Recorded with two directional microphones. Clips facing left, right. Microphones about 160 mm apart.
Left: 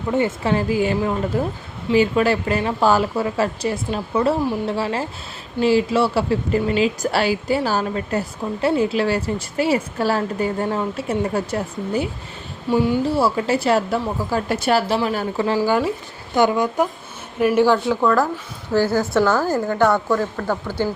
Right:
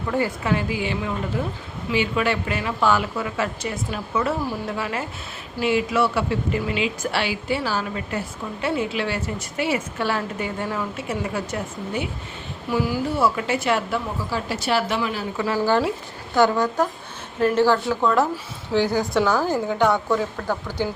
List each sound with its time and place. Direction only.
0.1 s a woman's voice: 25° left (ahead or behind)
0.5 s a woman's voice: 45° left (ahead or behind)
12.6 s a woman's voice: 25° left (ahead or behind); by 14.8 s 50° left (ahead or behind)
14.8 s a woman's voice: 35° left (ahead or behind)
16.3 s a woman's voice: 15° left (ahead or behind)
18.0 s speech: centre (ahead or behind)
19.3 s a woman's voice: 15° right (ahead or behind)